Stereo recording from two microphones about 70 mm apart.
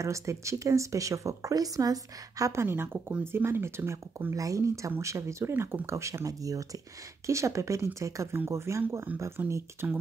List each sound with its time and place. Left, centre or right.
0.0 s speech: right
2.5 s speech: right
4.4 s speech: right
9.4 s speech: right